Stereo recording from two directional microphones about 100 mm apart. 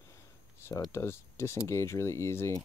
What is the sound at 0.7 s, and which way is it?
Speech, 30° left (ahead or behind).